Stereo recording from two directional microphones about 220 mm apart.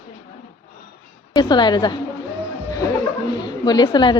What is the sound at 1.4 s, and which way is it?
Speech, 20° left (ahead or behind).